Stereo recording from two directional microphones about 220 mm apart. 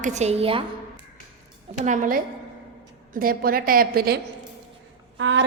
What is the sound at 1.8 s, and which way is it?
A woman's voice, 35° right (ahead or behind).